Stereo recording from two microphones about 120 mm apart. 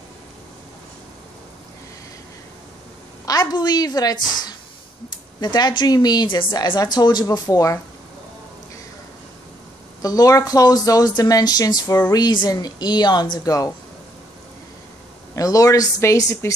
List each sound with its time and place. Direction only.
3.3 s a woman's voice: 35° left (ahead or behind)
10.0 s a woman's voice: 30° left (ahead or behind)
15.3 s speech: 30° left (ahead or behind)